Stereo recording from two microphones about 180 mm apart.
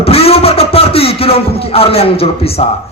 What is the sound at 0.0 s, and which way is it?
A man's voice, 35° left (ahead or behind).